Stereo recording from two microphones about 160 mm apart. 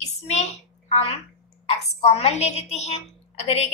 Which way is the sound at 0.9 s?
35° left (ahead or behind).